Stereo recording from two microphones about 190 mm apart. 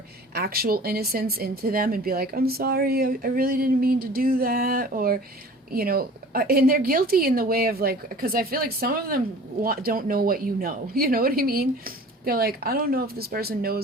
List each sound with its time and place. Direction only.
0.3 s speech: 55° right (ahead or behind)